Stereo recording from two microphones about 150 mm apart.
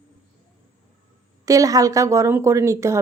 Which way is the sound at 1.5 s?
20° right (ahead or behind).